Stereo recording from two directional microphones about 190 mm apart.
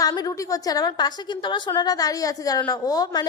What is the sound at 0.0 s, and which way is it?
A woman's voice, 20° left (ahead or behind).